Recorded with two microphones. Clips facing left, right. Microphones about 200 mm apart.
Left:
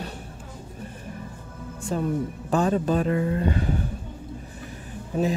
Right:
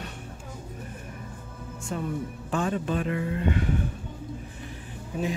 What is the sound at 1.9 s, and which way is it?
A woman's voice, 35° left (ahead or behind).